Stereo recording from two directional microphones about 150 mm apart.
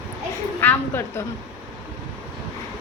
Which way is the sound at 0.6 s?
15° left (ahead or behind).